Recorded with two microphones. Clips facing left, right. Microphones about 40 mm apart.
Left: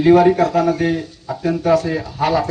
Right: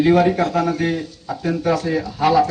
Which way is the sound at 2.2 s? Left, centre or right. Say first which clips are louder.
Right 2 dB; left.